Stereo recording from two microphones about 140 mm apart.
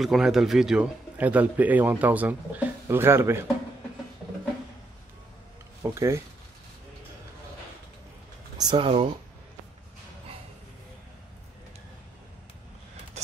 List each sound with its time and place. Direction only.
0.0 s a man's voice: 5° right (ahead or behind); by 3.4 s 20° right (ahead or behind)
5.8 s speech: 20° right (ahead or behind)
8.5 s speech: 30° right (ahead or behind)